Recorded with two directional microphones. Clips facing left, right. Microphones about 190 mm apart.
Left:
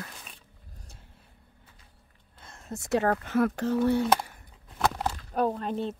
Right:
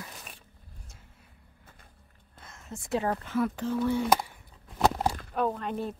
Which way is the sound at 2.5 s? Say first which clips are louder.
Left 4 dB; 35° left (ahead or behind).